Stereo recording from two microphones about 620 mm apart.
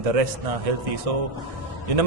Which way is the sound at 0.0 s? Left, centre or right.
Right.